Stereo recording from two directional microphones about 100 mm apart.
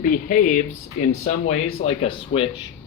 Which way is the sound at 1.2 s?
90° left.